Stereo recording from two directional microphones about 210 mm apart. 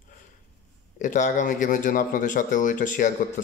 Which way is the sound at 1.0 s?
35° left (ahead or behind).